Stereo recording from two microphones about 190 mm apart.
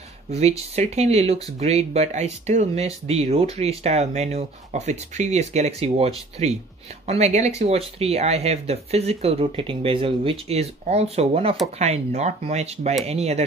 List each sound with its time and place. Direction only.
0.3 s speech: 35° right (ahead or behind)